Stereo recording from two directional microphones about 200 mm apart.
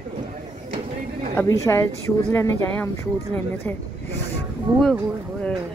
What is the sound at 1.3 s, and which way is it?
Speech, 15° left (ahead or behind).